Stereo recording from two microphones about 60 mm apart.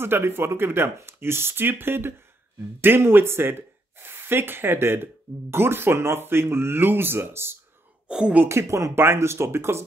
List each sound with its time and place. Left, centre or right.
0.0 s speech: right
8.1 s a woman's voice: centre
8.5 s speech: right
8.9 s speech: right